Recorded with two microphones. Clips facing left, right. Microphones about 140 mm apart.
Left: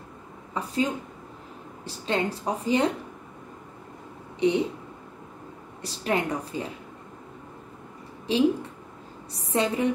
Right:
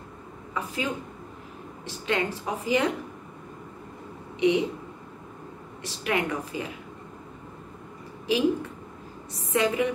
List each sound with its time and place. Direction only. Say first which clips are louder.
0.6 s a woman's voice: left 4 dB; 35° left (ahead or behind)
4.4 s speech: even; 35° left (ahead or behind)
5.8 s a woman's voice: left 1 dB; 35° left (ahead or behind)
8.3 s a woman's voice: left 1 dB; 30° left (ahead or behind)